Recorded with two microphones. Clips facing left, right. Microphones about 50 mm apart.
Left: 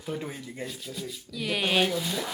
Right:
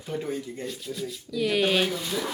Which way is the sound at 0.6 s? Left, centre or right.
Centre.